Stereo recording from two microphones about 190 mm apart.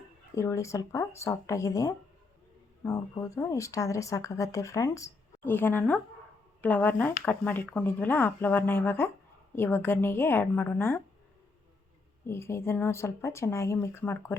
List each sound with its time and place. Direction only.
0.3 s speech: 15° left (ahead or behind)
12.2 s speech: 15° left (ahead or behind)